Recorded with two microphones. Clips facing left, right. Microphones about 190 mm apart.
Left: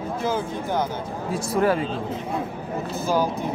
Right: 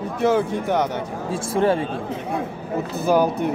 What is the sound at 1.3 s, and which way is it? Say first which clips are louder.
Speech: right 2 dB; 25° right (ahead or behind).